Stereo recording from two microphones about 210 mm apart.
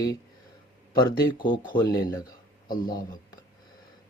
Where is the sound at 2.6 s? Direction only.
40° left (ahead or behind).